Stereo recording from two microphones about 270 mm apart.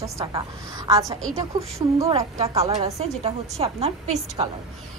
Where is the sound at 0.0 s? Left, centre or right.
Centre.